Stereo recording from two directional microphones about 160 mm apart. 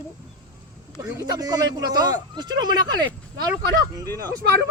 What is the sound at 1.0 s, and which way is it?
A man's voice, 20° right (ahead or behind).